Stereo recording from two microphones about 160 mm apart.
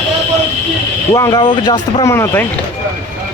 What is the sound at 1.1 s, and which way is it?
Speech, 25° left (ahead or behind).